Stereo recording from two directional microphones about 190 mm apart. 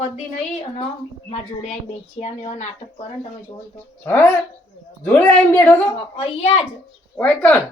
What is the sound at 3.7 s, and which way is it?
Speech, 10° left (ahead or behind).